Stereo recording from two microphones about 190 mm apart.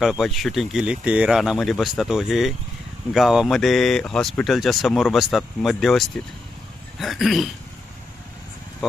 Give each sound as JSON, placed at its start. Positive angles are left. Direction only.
{"t": 0.0, "sound": "speech", "side_deg": 0}